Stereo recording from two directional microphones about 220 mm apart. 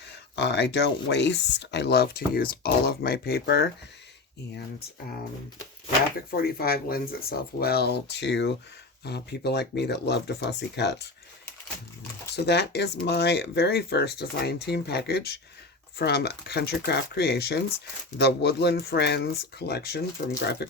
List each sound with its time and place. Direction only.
0.3 s speech: 50° left (ahead or behind)
6.3 s speech: 45° left (ahead or behind)
12.5 s speech: 50° left (ahead or behind)